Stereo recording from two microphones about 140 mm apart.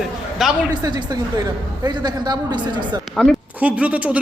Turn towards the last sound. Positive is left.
turn(degrees=-10)  # may be behind; listen again after turning